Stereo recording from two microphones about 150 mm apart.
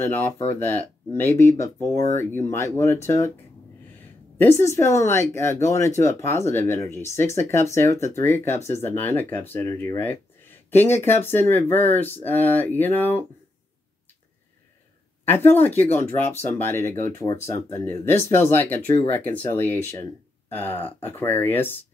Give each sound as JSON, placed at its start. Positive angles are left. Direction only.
{"t": 0.0, "sound": "speech", "side_deg": 15}
{"t": 4.4, "sound": "speech", "side_deg": 15}
{"t": 15.2, "sound": "speech", "side_deg": 15}